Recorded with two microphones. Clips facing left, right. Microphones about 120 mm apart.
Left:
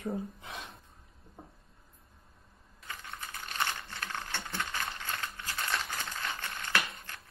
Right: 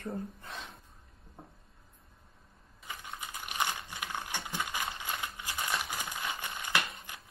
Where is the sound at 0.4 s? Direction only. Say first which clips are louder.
Left 1 dB; 15° left (ahead or behind).